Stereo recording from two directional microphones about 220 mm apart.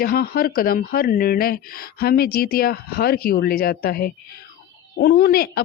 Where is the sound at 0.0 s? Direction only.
45° left (ahead or behind).